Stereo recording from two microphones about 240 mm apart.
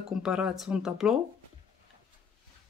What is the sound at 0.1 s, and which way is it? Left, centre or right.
Speech, centre.